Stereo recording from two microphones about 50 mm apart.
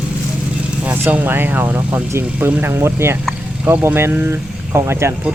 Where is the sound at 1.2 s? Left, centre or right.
Right.